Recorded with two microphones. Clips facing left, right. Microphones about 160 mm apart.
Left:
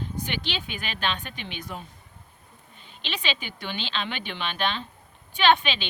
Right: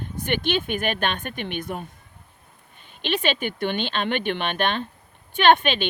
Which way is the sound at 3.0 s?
50° right (ahead or behind).